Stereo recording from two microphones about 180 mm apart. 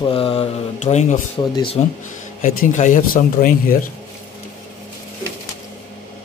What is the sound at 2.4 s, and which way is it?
Speech, 45° left (ahead or behind).